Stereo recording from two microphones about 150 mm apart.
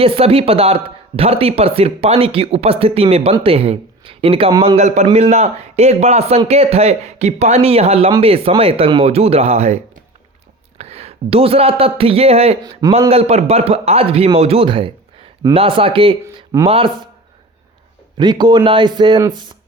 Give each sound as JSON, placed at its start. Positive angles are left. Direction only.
{"t": 0.0, "sound": "speech", "side_deg": -40}
{"t": 16.2, "sound": "speech", "side_deg": -20}
{"t": 16.6, "sound": "speech", "side_deg": -35}
{"t": 18.2, "sound": "speech", "side_deg": -30}